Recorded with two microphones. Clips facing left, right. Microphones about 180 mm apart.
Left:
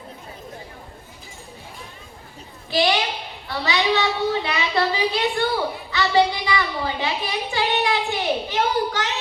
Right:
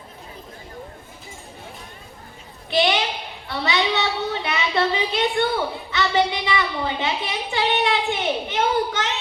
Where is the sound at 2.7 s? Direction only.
20° right (ahead or behind).